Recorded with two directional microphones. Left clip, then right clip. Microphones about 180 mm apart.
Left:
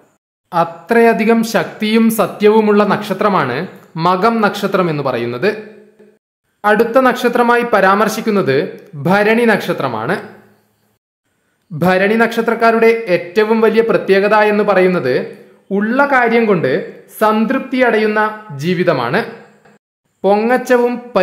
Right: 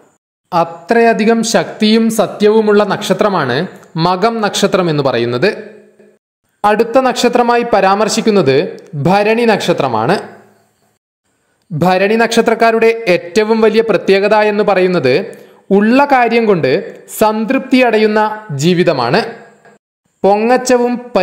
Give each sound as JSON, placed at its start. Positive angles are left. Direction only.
{"t": 0.5, "sound": "speech", "side_deg": -20}
{"t": 2.7, "sound": "speech", "side_deg": -30}
{"t": 6.6, "sound": "speech", "side_deg": -30}
{"t": 11.8, "sound": "a man's voice", "side_deg": -25}